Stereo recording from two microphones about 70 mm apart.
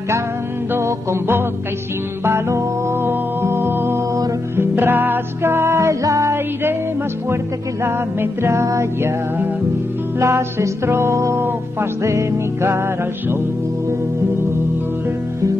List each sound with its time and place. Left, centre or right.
0.7 s music: right
7.8 s music: right
10.1 s music: right